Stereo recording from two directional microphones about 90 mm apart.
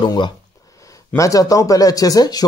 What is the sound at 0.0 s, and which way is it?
Speech, 60° left (ahead or behind).